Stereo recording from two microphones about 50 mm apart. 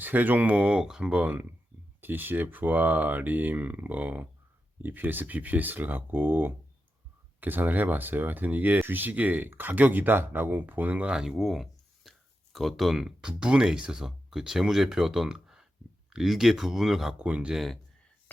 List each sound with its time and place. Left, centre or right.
0.0 s speech: right
0.9 s speech: centre
1.1 s speech: right
2.0 s speech: right
11.1 s speech: centre
17.2 s speech: right